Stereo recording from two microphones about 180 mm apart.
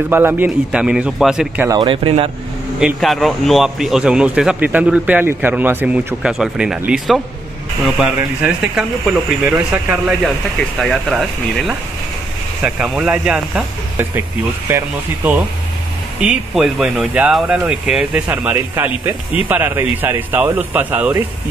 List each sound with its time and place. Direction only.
0.1 s speech: 10° right (ahead or behind)
1.7 s speech: 25° right (ahead or behind)
2.8 s speech: centre (ahead or behind)
16.2 s speech: 5° right (ahead or behind)